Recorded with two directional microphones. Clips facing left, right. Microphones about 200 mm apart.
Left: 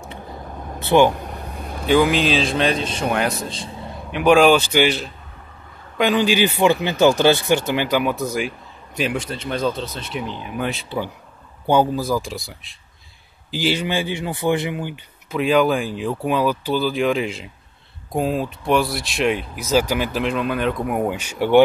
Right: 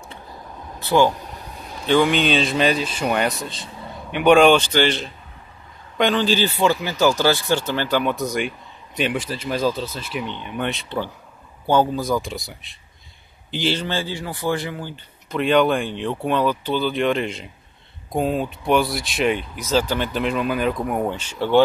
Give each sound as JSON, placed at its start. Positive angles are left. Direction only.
{"t": 0.3, "sound": "vehicle", "side_deg": 50}
{"t": 0.7, "sound": "speech", "side_deg": 20}
{"t": 1.1, "sound": "a sound", "side_deg": 55}
{"t": 1.9, "sound": "a man's voice", "side_deg": 5}
{"t": 11.6, "sound": "speech", "side_deg": 15}
{"t": 15.2, "sound": "speech", "side_deg": 5}